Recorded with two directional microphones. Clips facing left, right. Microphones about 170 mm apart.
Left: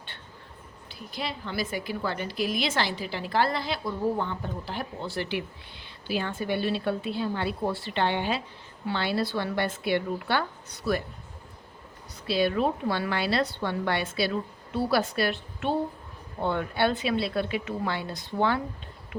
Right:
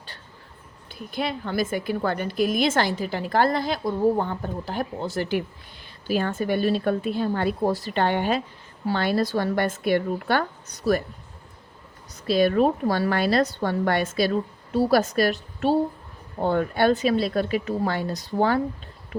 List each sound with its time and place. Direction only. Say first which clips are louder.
0.9 s a woman's voice: right 6 dB; 55° right (ahead or behind)
12.1 s a woman's voice: right 6 dB; 45° right (ahead or behind)